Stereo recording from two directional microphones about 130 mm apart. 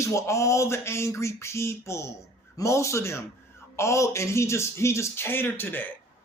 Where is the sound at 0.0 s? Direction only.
25° left (ahead or behind).